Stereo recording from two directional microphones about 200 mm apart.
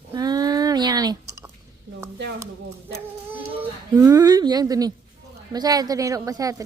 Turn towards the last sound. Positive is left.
turn(degrees=-15)  # may be behind; listen again after turning